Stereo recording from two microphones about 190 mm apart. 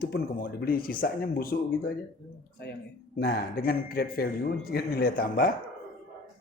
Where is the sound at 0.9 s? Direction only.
50° left (ahead or behind).